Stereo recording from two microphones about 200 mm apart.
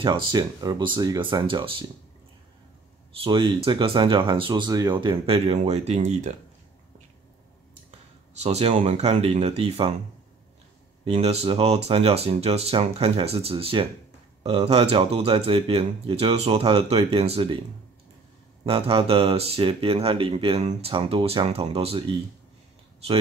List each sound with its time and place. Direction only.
0.0 s speech: 20° right (ahead or behind)
3.3 s speech: 25° right (ahead or behind)
8.4 s speech: 30° right (ahead or behind)
11.1 s speech: 30° right (ahead or behind)
18.6 s speech: 30° right (ahead or behind)